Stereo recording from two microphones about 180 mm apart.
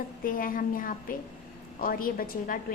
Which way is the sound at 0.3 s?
50° left (ahead or behind).